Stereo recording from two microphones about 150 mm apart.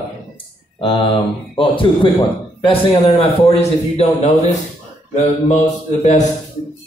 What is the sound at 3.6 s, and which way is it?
Mantra, 45° left (ahead or behind).